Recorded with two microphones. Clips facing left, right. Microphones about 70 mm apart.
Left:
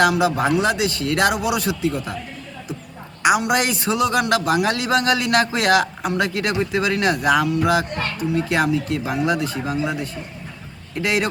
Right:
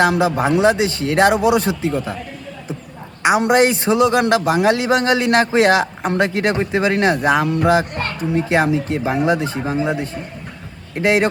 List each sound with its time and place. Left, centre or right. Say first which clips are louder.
0.0 s a man's voice: right 2 dB; right
3.2 s a man's voice: right 4 dB; right